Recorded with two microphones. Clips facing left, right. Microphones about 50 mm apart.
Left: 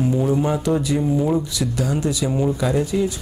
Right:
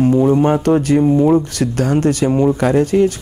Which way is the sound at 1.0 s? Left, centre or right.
Right.